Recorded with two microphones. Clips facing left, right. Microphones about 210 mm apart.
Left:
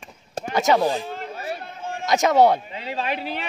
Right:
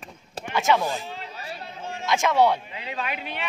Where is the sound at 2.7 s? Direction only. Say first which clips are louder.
Left 5 dB; 30° left (ahead or behind).